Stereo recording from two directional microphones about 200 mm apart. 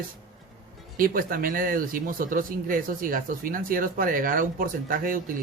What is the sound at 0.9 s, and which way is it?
Speech, 45° right (ahead or behind).